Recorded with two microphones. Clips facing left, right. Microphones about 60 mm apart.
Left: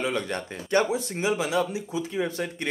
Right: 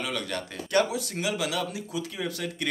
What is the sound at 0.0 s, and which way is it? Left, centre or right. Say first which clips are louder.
Speech: left 4 dB; left.